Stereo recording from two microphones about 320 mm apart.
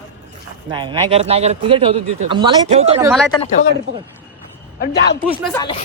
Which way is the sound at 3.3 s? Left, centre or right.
Centre.